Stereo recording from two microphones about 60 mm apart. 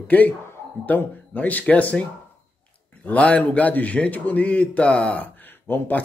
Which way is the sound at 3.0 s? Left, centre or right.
Left.